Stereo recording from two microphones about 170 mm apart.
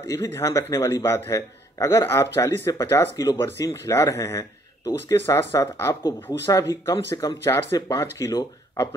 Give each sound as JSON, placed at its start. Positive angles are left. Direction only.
{"t": 0.1, "sound": "speech", "side_deg": 20}